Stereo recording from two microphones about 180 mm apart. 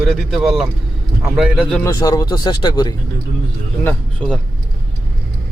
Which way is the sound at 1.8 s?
20° left (ahead or behind).